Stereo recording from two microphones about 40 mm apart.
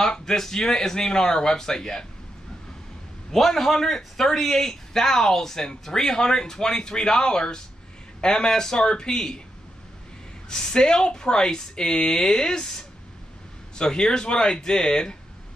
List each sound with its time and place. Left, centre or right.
0.1 s a man's voice: centre
3.3 s a man's voice: centre
10.5 s speech: centre